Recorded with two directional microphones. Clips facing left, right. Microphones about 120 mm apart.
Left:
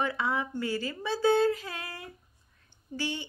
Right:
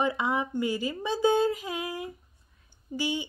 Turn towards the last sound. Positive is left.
turn(degrees=-15)  # may be behind; listen again after turning